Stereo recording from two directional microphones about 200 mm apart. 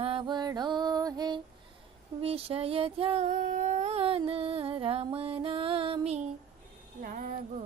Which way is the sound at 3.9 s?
30° right (ahead or behind).